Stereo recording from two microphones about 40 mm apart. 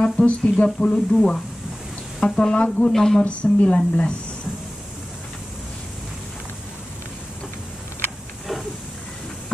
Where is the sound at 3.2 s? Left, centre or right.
Left.